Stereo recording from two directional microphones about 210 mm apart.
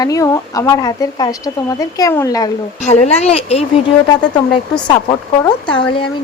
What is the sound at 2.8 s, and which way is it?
Speech, 30° left (ahead or behind).